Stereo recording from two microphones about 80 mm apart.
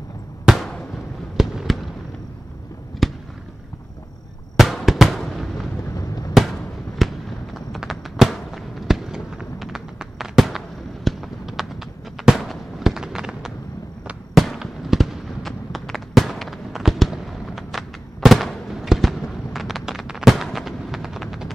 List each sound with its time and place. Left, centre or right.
1.3 s fireworks: centre
3.0 s fireworks: centre
4.6 s fireworks: centre
5.9 s fireworks: left
6.3 s fireworks: centre